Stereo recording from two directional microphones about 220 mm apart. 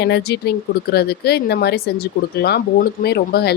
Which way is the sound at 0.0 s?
50° left (ahead or behind).